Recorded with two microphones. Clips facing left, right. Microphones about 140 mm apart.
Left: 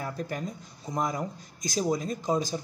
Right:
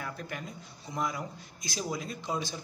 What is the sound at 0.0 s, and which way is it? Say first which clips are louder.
Speech: left 6 dB; 40° left (ahead or behind).